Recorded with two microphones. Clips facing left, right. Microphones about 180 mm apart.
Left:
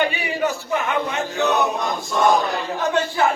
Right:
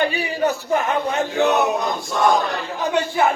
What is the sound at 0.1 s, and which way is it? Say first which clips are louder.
A man's voice: right 2 dB; 40° right (ahead or behind).